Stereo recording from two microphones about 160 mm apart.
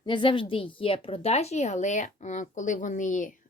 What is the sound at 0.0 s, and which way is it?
Speech, 30° left (ahead or behind).